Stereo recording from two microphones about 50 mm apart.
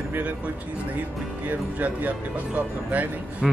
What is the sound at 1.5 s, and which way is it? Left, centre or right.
Speech, right.